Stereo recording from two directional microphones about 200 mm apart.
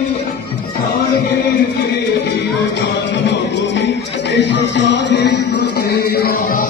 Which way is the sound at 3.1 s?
60° left (ahead or behind).